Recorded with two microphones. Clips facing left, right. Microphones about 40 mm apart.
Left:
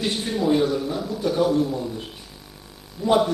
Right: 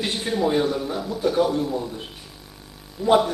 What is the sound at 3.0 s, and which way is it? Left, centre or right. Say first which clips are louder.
Speech: right 2 dB; centre.